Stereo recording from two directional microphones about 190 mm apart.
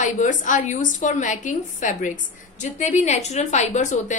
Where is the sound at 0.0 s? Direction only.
40° left (ahead or behind).